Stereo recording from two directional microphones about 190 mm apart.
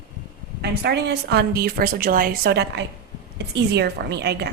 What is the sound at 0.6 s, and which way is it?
A woman's voice, 60° right (ahead or behind).